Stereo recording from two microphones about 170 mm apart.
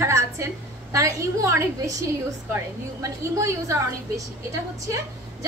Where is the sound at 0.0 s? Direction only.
15° right (ahead or behind).